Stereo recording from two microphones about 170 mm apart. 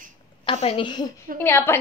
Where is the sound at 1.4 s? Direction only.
15° left (ahead or behind).